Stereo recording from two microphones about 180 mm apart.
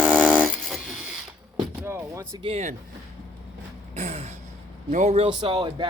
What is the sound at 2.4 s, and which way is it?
Speech, 35° right (ahead or behind).